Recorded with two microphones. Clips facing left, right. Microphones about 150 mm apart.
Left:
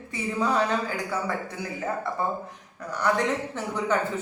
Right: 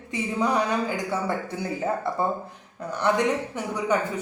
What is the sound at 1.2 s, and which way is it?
Speech, 30° right (ahead or behind).